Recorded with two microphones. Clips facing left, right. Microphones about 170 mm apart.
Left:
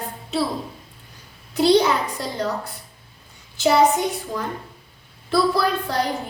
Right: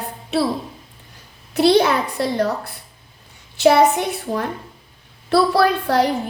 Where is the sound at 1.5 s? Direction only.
65° right (ahead or behind).